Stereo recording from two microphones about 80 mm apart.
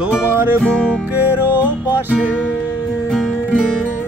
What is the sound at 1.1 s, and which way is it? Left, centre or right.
Music, right.